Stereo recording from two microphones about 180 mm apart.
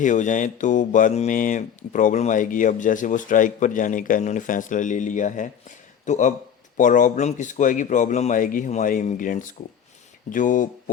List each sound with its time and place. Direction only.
0.0 s speech: 45° left (ahead or behind)